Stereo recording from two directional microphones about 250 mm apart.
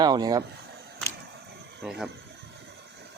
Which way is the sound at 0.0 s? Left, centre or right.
Centre.